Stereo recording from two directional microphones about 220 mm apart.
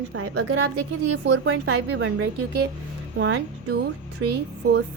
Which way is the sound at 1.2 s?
55° right (ahead or behind).